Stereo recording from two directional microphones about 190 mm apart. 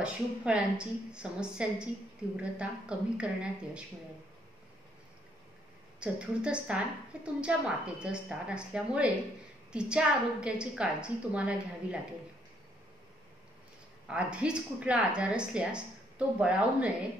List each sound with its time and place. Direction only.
0.0 s speech: 5° right (ahead or behind)
5.9 s speech: 5° right (ahead or behind)
14.0 s speech: 5° right (ahead or behind)